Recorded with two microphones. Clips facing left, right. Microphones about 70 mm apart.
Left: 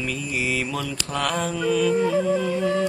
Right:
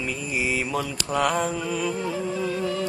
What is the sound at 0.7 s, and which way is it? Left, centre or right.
Mantra, centre.